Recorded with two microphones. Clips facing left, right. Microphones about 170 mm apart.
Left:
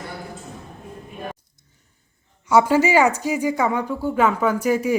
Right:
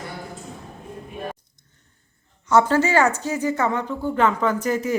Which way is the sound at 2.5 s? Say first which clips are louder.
Left 1 dB; 10° left (ahead or behind).